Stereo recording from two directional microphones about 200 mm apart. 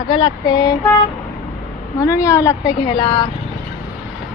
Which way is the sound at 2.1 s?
15° left (ahead or behind).